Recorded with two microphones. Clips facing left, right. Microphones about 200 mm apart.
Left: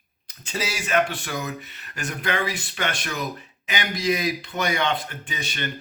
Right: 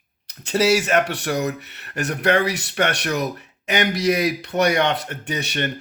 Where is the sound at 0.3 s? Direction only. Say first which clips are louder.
Right 12 dB; 70° right (ahead or behind).